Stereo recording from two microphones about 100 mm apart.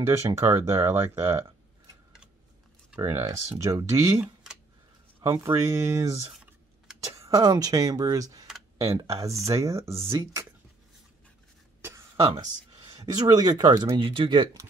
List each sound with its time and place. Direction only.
0.1 s speech: 30° right (ahead or behind)
3.0 s speech: 30° right (ahead or behind)
13.0 s speech: 45° right (ahead or behind)
13.9 s speech: 60° right (ahead or behind)